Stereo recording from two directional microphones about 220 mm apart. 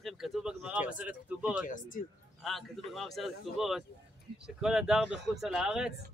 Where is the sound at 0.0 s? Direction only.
Centre (ahead or behind).